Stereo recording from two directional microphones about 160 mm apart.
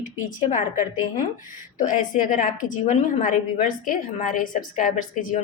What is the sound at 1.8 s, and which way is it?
A woman's voice, 55° left (ahead or behind).